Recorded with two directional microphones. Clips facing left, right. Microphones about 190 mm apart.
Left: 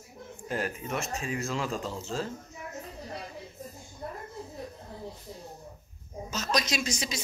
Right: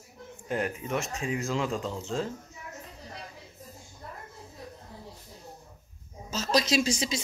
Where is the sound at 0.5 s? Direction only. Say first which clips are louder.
Right 2 dB; 20° right (ahead or behind).